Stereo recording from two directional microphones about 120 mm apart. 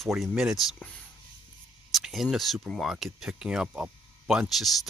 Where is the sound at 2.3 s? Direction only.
Centre (ahead or behind).